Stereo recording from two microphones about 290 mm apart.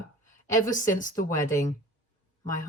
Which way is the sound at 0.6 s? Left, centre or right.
Left.